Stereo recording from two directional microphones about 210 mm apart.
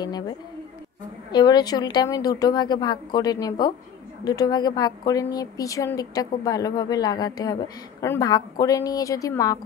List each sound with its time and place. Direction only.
1.3 s a woman's voice: 20° left (ahead or behind)